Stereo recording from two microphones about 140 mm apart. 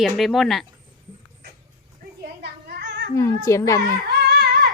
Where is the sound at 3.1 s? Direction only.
20° left (ahead or behind).